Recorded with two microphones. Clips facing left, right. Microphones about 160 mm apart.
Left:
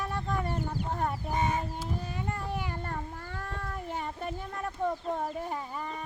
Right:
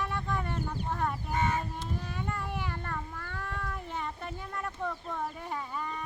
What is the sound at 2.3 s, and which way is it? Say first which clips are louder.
Cat: left 1 dB; 40° left (ahead or behind).